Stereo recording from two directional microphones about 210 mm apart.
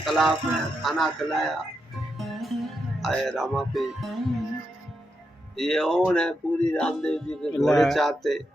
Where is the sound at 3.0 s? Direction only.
Centre (ahead or behind).